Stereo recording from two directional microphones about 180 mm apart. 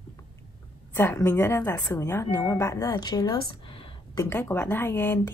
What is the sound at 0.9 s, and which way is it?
Speech, 15° left (ahead or behind).